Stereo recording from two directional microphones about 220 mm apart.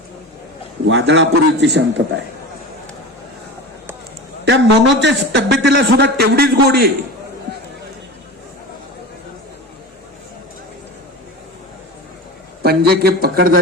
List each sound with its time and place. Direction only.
0.9 s a man's voice: 55° right (ahead or behind)
4.4 s a man's voice: 55° right (ahead or behind)
12.6 s a man's voice: 45° right (ahead or behind)